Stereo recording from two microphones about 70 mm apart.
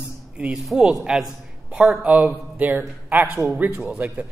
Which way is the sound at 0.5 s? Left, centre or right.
Centre.